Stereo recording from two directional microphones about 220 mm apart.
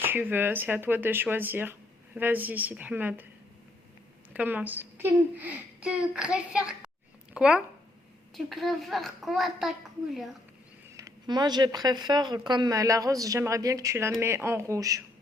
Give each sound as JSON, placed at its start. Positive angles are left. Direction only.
{"t": 0.0, "sound": "a woman's voice", "side_deg": -10}
{"t": 4.4, "sound": "a woman's voice", "side_deg": -10}
{"t": 10.9, "sound": "a woman's voice", "side_deg": -15}